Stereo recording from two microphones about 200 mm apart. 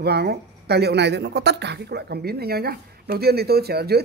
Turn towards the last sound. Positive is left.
turn(degrees=-50)  # may be behind; listen again after turning